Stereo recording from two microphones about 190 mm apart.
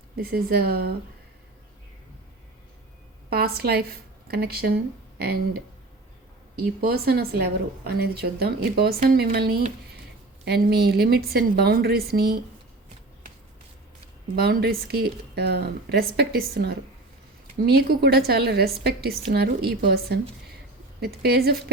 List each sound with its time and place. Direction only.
0.2 s speech: 55° right (ahead or behind)
3.2 s a woman's voice: 55° right (ahead or behind)
14.3 s a woman's voice: 55° right (ahead or behind)